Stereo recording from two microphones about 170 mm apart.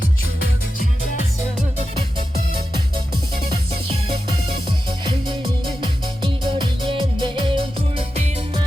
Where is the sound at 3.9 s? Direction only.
30° right (ahead or behind).